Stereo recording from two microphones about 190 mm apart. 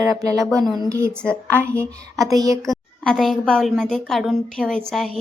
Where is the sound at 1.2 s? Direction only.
5° left (ahead or behind).